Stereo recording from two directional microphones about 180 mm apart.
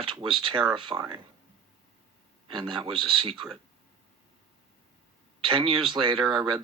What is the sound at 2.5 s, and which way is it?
Speech, 25° right (ahead or behind).